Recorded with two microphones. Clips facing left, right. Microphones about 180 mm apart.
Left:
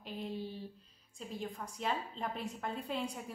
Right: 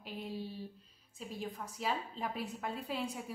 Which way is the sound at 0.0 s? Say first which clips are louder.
Left 1 dB; 5° right (ahead or behind).